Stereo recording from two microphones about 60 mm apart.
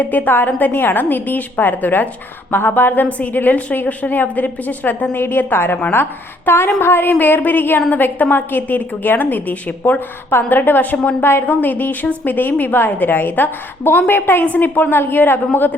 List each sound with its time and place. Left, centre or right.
0.0 s a woman's voice: left
11.4 s a woman's voice: left